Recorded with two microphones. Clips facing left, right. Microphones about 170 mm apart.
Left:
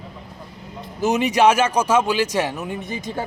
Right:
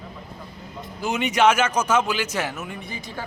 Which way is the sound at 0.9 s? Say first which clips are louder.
Left 4 dB; 40° left (ahead or behind).